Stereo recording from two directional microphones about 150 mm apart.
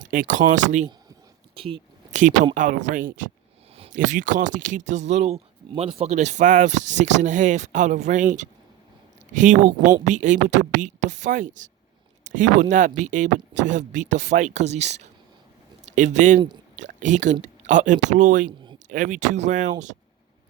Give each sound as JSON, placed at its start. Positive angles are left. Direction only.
{"t": 0.0, "sound": "speech", "side_deg": -60}
{"t": 1.5, "sound": "speech", "side_deg": -35}
{"t": 2.1, "sound": "speech", "side_deg": -55}